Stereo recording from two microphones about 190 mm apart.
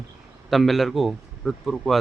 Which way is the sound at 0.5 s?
Centre (ahead or behind).